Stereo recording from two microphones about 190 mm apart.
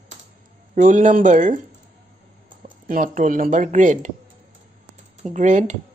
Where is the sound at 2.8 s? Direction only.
45° right (ahead or behind).